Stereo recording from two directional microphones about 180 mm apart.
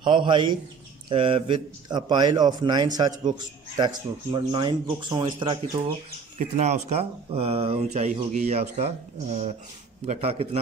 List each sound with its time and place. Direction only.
0.0 s a man's voice: 25° right (ahead or behind)
6.3 s speech: 40° right (ahead or behind)